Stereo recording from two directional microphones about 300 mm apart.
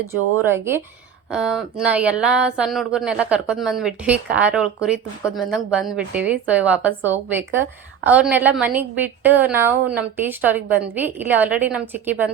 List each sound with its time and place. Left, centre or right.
0.1 s speech: right
0.4 s a woman's voice: centre